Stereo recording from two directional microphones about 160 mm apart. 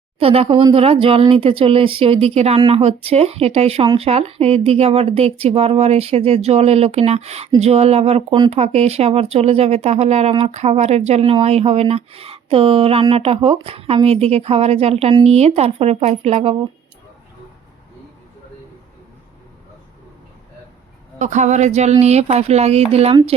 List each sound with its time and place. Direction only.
0.2 s speech: 35° right (ahead or behind)
21.2 s speech: 50° right (ahead or behind)